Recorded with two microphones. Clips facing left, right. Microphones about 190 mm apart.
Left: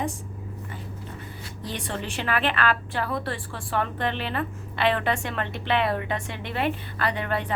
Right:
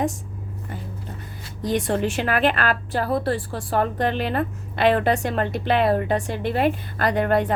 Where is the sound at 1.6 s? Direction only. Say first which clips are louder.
Right 10 dB; 45° right (ahead or behind).